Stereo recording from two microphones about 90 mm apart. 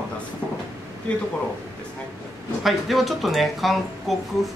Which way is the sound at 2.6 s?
Centre (ahead or behind).